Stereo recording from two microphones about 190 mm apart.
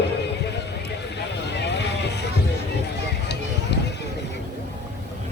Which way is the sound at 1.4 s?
65° left (ahead or behind).